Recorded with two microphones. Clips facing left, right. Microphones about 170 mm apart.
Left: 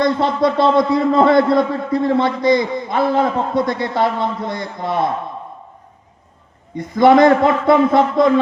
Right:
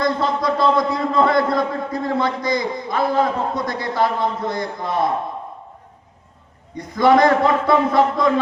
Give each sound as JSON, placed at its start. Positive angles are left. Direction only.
{"t": 0.0, "sound": "a man's voice", "side_deg": 25}
{"t": 6.7, "sound": "a man's voice", "side_deg": 25}